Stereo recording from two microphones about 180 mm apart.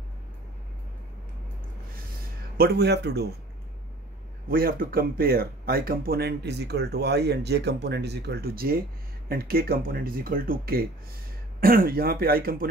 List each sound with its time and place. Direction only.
2.5 s speech: 60° right (ahead or behind)
4.5 s speech: 55° right (ahead or behind)